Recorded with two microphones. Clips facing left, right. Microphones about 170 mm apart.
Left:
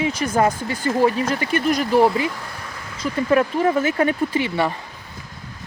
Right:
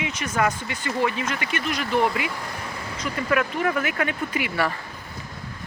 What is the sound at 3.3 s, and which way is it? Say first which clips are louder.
Speech: left 6 dB; 30° left (ahead or behind).